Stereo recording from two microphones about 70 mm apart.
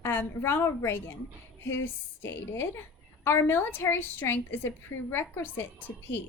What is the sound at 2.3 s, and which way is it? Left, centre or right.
A woman's voice, left.